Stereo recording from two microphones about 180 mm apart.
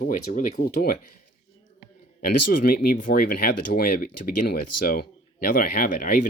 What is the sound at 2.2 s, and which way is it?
Speech, 50° left (ahead or behind).